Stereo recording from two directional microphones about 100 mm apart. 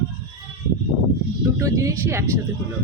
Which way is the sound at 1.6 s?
30° right (ahead or behind).